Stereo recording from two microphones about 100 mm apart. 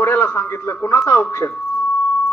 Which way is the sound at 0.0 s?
25° left (ahead or behind).